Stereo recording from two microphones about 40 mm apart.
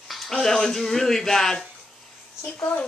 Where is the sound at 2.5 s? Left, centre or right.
Left.